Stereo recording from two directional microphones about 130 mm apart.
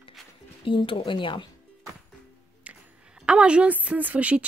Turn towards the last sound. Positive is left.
turn(degrees=-10)  # may be behind; listen again after turning